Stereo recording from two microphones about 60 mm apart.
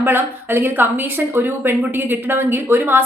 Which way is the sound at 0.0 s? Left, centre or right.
Right.